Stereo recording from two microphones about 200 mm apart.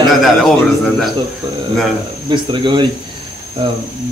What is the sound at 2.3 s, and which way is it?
Speech, 25° right (ahead or behind).